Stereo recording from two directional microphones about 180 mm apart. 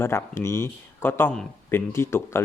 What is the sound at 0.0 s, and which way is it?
Speech, 15° left (ahead or behind).